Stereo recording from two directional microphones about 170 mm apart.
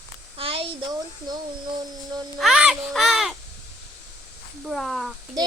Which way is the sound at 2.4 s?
5° right (ahead or behind).